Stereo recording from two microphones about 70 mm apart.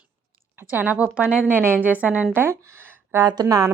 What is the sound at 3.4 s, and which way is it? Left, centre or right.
Speech, right.